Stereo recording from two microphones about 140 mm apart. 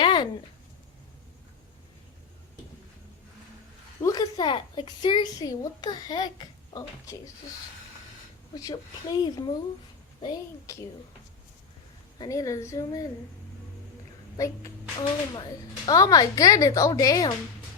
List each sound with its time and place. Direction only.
0.0 s a sound: 35° left (ahead or behind)
4.0 s a woman's voice: 30° left (ahead or behind)
8.5 s a woman's voice: 30° left (ahead or behind)
12.2 s a woman's voice: 25° left (ahead or behind)
14.3 s a woman's voice: 25° left (ahead or behind)